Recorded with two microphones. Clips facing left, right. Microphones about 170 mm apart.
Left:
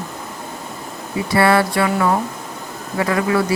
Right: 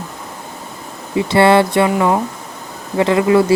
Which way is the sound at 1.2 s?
25° right (ahead or behind).